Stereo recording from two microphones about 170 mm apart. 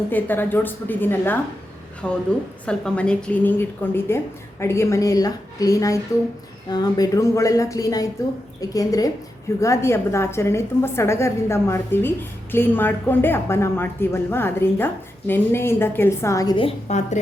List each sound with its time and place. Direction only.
0.1 s a woman's voice: 10° left (ahead or behind); by 17.2 s 40° left (ahead or behind)